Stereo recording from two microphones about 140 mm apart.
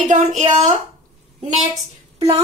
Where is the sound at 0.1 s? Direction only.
60° right (ahead or behind).